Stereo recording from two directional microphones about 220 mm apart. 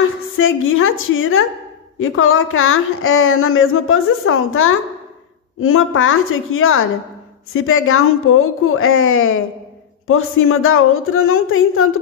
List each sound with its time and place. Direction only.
0.4 s a woman's voice: 65° left (ahead or behind)